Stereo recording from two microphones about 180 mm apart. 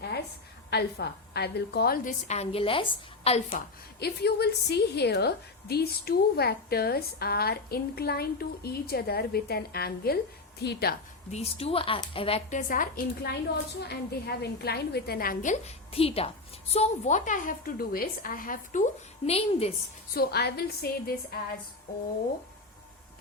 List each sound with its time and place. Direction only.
0.7 s a woman's voice: 60° left (ahead or behind)
2.2 s a woman's voice: 35° left (ahead or behind)
4.0 s a woman's voice: 65° left (ahead or behind)
11.3 s a woman's voice: 35° left (ahead or behind)
12.5 s a woman's voice: 45° left (ahead or behind)
13.8 s a woman's voice: 65° left (ahead or behind)
19.2 s a woman's voice: 35° left (ahead or behind)
20.1 s a woman's voice: 60° left (ahead or behind)